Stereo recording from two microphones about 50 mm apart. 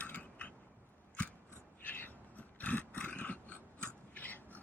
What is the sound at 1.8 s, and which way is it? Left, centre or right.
Dog, left.